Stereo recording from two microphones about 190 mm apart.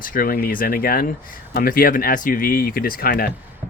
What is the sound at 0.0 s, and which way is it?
Speech, 45° left (ahead or behind).